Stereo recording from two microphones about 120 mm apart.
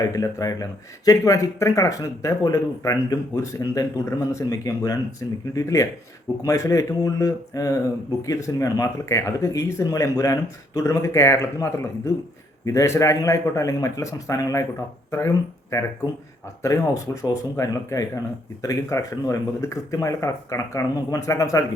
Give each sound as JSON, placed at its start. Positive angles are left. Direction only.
{"t": 0.1, "sound": "speech", "side_deg": 30}
{"t": 16.6, "sound": "speech", "side_deg": 25}